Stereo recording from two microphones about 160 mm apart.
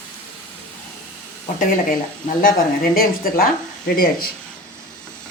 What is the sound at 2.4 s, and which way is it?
Speech, 65° left (ahead or behind).